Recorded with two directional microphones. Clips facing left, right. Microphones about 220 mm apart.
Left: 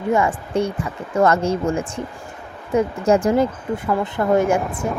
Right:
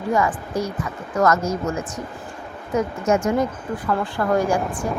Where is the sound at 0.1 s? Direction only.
25° left (ahead or behind).